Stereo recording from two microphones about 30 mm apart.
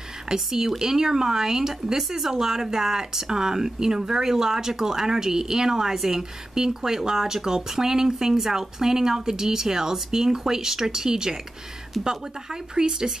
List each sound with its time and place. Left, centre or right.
0.3 s speech: centre
12.7 s speech: right